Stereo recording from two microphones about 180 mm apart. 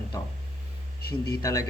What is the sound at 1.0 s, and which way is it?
Speech, 60° left (ahead or behind).